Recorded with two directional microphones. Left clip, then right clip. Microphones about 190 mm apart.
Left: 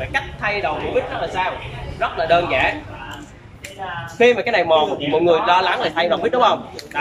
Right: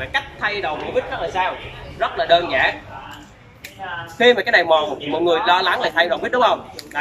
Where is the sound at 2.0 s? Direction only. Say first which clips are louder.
Right 1 dB; centre (ahead or behind).